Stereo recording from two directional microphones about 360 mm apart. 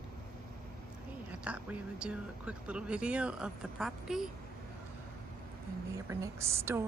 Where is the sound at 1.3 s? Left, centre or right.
Centre.